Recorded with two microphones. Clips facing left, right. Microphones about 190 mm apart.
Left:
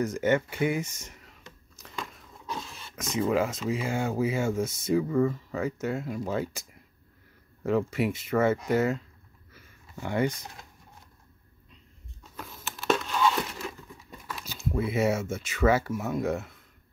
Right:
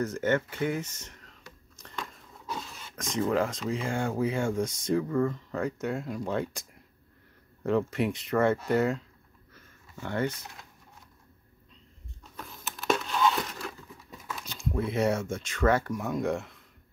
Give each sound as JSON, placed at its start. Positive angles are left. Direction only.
{"t": 0.0, "sound": "speech", "side_deg": 10}
{"t": 1.8, "sound": "biting", "side_deg": 5}
{"t": 2.4, "sound": "speech", "side_deg": 0}
{"t": 9.5, "sound": "a sound", "side_deg": 10}
{"t": 12.2, "sound": "crumpling", "side_deg": 0}